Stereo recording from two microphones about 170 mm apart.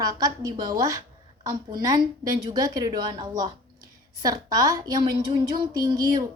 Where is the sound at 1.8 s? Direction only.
20° right (ahead or behind).